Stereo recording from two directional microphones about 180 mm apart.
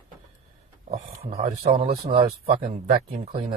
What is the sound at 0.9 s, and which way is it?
Speech, 35° right (ahead or behind).